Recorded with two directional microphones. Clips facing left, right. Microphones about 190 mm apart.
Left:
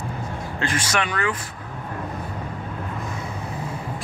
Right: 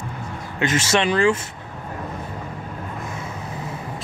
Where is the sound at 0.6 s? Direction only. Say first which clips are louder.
Right 6 dB; 25° right (ahead or behind).